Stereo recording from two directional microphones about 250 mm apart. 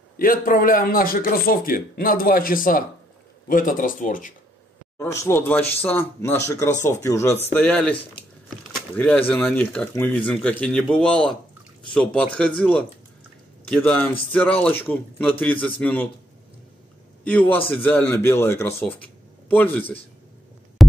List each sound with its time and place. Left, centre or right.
0.2 s speech: left
4.9 s speech: centre
17.2 s speech: centre